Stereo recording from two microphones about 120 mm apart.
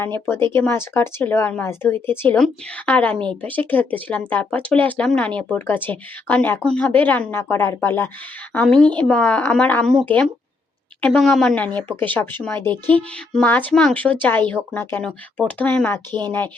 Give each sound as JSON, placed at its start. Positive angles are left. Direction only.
{"t": 0.0, "sound": "a woman's voice", "side_deg": 20}
{"t": 12.6, "sound": "speech", "side_deg": -40}
{"t": 12.9, "sound": "a woman's voice", "side_deg": 10}